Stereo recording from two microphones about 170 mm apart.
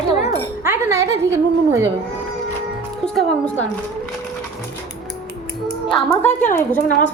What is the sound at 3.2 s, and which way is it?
Speech, 10° left (ahead or behind).